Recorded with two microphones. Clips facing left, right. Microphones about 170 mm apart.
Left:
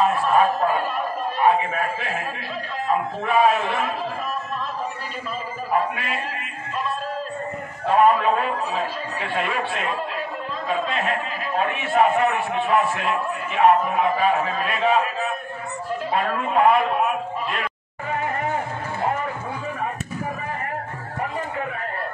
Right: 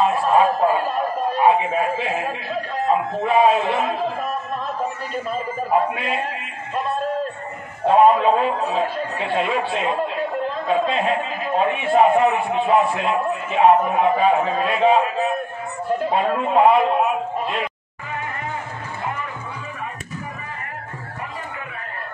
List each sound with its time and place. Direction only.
0.0 s a sound: 20° right (ahead or behind)
1.4 s a man's voice: 15° right (ahead or behind)
3.3 s a man's voice: 25° right (ahead or behind)
5.7 s a man's voice: 25° right (ahead or behind)
7.8 s a man's voice: 25° right (ahead or behind)
16.1 s a man's voice: 20° right (ahead or behind)